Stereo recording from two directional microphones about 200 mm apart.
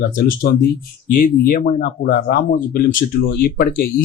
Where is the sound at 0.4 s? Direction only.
45° left (ahead or behind).